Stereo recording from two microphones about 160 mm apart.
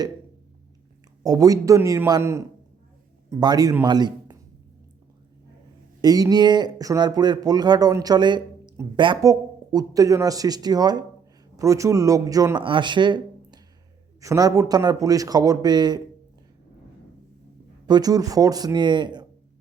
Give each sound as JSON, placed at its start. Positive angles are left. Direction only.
{"t": 1.2, "sound": "a man's voice", "side_deg": -25}
{"t": 6.0, "sound": "speech", "side_deg": -25}
{"t": 17.8, "sound": "speech", "side_deg": -25}